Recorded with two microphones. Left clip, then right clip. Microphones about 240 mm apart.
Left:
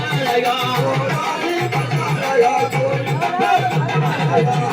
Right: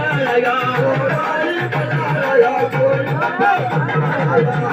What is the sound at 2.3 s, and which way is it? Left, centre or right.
Music, left.